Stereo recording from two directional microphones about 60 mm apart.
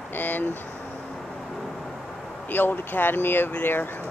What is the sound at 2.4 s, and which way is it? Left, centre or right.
Speech, left.